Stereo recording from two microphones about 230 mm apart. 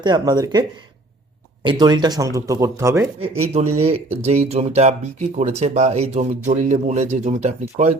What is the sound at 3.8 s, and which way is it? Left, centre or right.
Speech, right.